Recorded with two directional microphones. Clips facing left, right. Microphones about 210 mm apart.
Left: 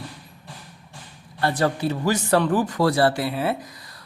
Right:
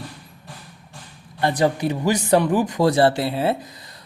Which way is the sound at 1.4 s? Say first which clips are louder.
Right 2 dB; 15° right (ahead or behind).